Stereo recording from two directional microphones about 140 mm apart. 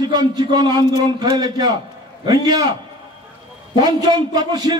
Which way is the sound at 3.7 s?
30° right (ahead or behind).